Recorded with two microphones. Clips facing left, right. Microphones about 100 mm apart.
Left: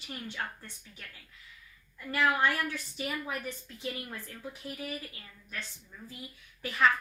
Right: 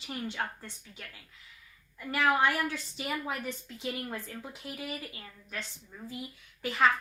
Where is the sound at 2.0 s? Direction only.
20° right (ahead or behind).